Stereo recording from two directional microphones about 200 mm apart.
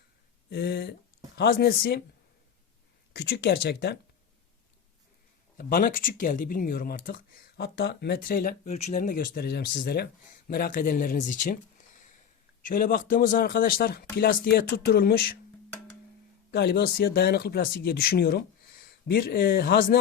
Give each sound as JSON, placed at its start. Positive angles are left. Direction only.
{"t": 0.5, "sound": "speech", "side_deg": 55}
{"t": 3.1, "sound": "speech", "side_deg": 55}
{"t": 5.5, "sound": "speech", "side_deg": 45}
{"t": 16.5, "sound": "speech", "side_deg": 55}